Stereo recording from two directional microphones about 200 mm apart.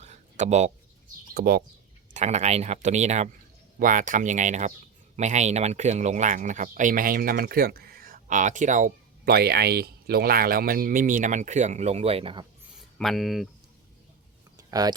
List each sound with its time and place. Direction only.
0.0 s a sound: 35° right (ahead or behind)
1.3 s speech: 50° right (ahead or behind)
2.1 s speech: 35° right (ahead or behind)
13.0 s speech: centre (ahead or behind)
14.7 s speech: 20° right (ahead or behind)